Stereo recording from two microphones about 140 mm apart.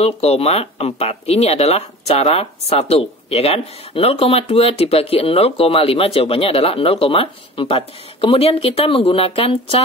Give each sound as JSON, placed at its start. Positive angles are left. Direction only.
{"t": 0.0, "sound": "speech", "side_deg": 45}